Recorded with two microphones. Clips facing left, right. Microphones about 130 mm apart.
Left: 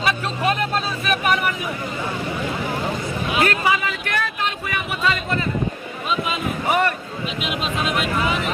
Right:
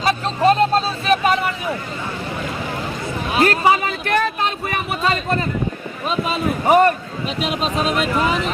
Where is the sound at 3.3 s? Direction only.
35° right (ahead or behind).